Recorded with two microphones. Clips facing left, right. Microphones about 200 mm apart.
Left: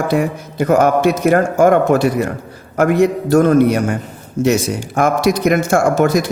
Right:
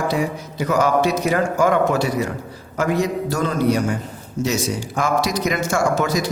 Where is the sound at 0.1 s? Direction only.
55° left (ahead or behind).